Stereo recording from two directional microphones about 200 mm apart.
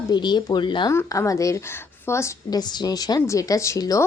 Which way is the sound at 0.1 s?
20° left (ahead or behind).